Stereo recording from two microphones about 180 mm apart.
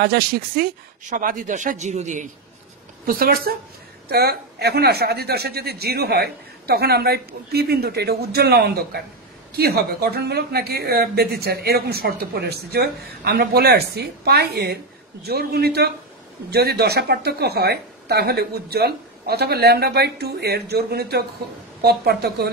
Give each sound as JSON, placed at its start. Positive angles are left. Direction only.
{"t": 0.0, "sound": "a woman's voice", "side_deg": -55}
{"t": 3.1, "sound": "a woman's voice", "side_deg": -55}